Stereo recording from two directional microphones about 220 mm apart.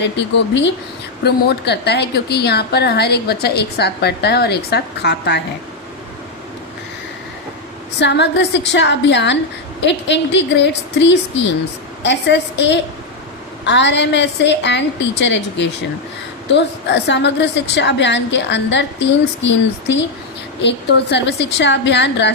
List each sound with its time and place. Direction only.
0.2 s a woman's voice: 55° left (ahead or behind)
7.9 s a woman's voice: 50° left (ahead or behind)